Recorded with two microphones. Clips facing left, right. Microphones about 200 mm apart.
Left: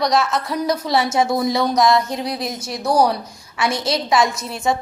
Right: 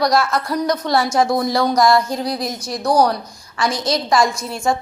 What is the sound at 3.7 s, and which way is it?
Speech, 25° left (ahead or behind).